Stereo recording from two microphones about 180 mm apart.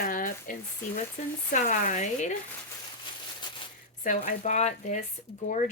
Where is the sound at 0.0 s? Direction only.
45° left (ahead or behind).